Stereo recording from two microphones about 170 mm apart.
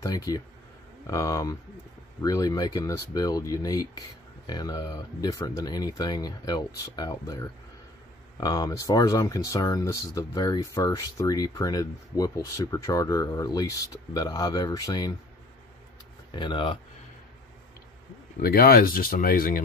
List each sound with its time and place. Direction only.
0.0 s speech: 20° left (ahead or behind)
16.3 s speech: 25° left (ahead or behind)
18.4 s speech: 60° left (ahead or behind)